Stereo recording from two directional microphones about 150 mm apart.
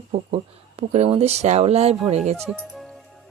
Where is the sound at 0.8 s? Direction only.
40° right (ahead or behind).